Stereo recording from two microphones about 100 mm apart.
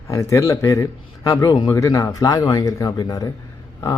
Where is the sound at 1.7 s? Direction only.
30° left (ahead or behind).